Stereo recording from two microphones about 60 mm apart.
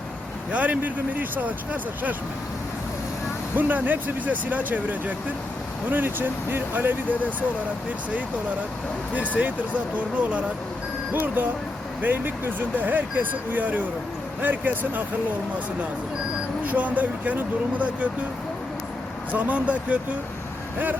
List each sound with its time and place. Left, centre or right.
0.5 s speech: right
3.5 s speech: right
9.3 s speech: right
11.1 s speech: right
16.6 s speech: right
19.3 s speech: right